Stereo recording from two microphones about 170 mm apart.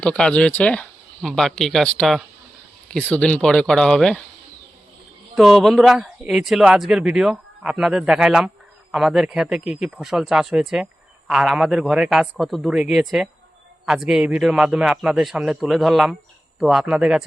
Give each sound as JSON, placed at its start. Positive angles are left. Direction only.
{"t": 0.0, "sound": "speech", "side_deg": 5}
{"t": 5.4, "sound": "speech", "side_deg": 0}